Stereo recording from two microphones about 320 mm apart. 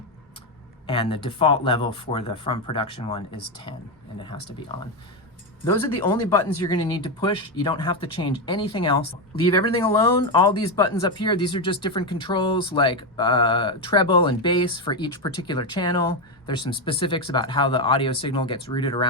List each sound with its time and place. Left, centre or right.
0.9 s speech: centre
5.6 s speech: centre